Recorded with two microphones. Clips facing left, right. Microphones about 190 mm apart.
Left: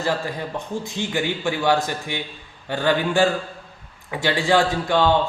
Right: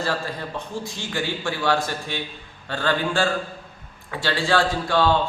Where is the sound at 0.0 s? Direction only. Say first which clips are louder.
Left 2 dB; 15° left (ahead or behind).